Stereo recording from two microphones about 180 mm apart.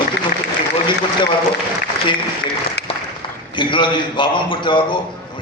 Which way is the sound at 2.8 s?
70° left (ahead or behind).